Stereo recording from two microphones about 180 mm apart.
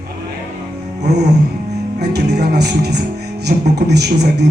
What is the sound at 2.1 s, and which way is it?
Speech, 65° right (ahead or behind).